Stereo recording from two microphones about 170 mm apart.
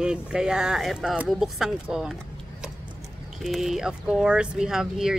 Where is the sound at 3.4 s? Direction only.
Centre (ahead or behind).